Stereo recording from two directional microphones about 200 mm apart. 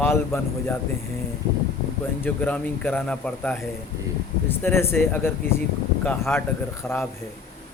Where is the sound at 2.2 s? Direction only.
10° left (ahead or behind).